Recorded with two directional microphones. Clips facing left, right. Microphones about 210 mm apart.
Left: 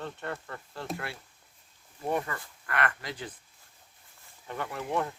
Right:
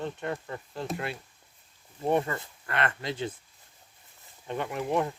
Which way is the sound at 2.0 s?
25° right (ahead or behind).